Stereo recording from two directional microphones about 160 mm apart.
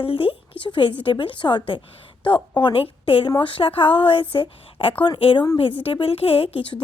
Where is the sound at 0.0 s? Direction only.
35° left (ahead or behind).